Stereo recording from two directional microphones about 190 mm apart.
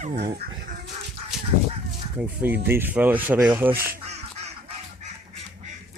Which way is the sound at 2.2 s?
10° right (ahead or behind).